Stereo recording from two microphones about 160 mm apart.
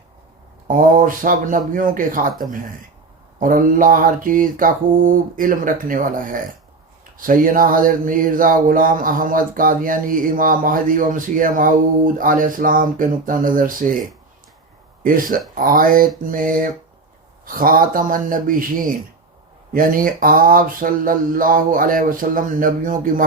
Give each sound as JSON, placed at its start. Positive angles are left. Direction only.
{"t": 0.7, "sound": "speech", "side_deg": -55}
{"t": 15.0, "sound": "speech", "side_deg": -60}
{"t": 19.7, "sound": "speech", "side_deg": -60}